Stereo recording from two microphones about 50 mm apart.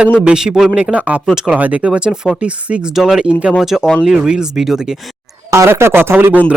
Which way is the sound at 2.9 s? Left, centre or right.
Centre.